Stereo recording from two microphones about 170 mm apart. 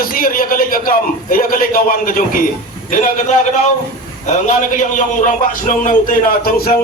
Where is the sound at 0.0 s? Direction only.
55° left (ahead or behind).